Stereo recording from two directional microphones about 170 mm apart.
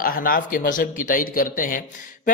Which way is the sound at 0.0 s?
55° left (ahead or behind).